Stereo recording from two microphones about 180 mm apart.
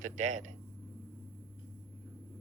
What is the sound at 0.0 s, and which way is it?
Speech, 40° right (ahead or behind).